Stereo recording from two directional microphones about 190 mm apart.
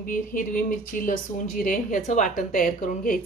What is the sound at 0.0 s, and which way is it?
Speech, 45° left (ahead or behind).